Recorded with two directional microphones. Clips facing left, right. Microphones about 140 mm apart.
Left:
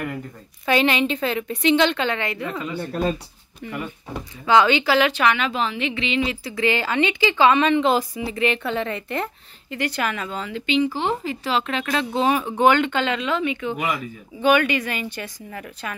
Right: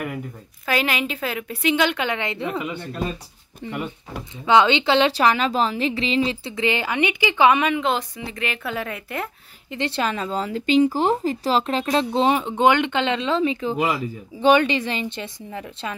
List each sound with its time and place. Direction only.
0.7 s a woman's voice: 5° right (ahead or behind)
7.8 s a woman's voice: 5° left (ahead or behind)
9.7 s speech: 25° right (ahead or behind)